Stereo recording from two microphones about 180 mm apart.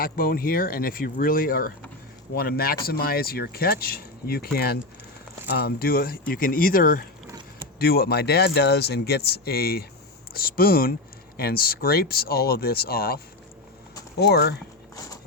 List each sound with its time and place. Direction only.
0.0 s speech: 55° left (ahead or behind)
14.2 s speech: 65° left (ahead or behind)